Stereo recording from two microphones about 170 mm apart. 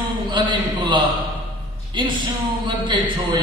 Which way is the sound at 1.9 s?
30° right (ahead or behind).